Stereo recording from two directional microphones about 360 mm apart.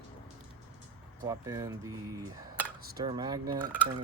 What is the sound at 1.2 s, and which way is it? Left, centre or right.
Speech, centre.